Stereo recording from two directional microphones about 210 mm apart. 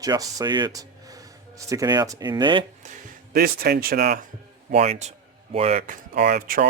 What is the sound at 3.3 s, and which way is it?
Speech, 45° right (ahead or behind).